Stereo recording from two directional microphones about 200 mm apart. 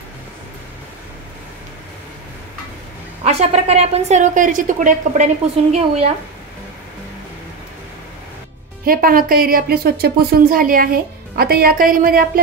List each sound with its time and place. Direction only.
3.3 s a woman's voice: 30° right (ahead or behind)
8.8 s a woman's voice: 45° right (ahead or behind)